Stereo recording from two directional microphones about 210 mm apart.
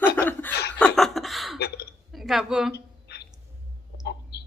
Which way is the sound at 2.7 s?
50° left (ahead or behind).